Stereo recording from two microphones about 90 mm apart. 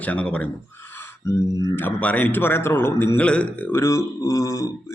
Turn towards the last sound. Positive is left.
turn(degrees=35)  # may be behind; listen again after turning